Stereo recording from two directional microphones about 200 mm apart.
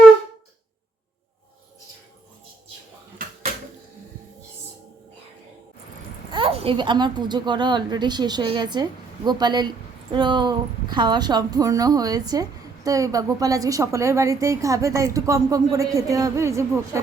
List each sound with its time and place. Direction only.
6.3 s a woman's voice: 30° right (ahead or behind)